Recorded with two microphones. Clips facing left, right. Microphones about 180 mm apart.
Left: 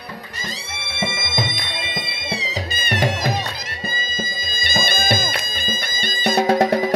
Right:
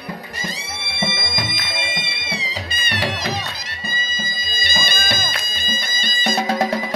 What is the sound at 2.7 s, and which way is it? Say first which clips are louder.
Music: left 3 dB; 45° left (ahead or behind).